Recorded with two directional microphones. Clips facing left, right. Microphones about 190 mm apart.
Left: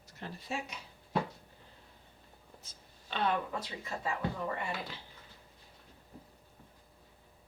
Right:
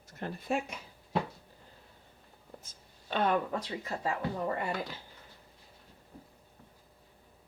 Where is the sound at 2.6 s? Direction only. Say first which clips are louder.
Right 1 dB; 50° right (ahead or behind).